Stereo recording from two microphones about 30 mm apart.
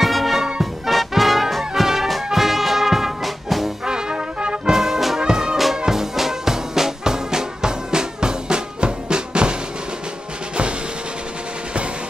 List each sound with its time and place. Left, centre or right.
0.0 s music: centre
3.8 s brass instrument: right
4.7 s brass instrument: centre
5.2 s music: right
5.9 s music: centre; by 9.6 s right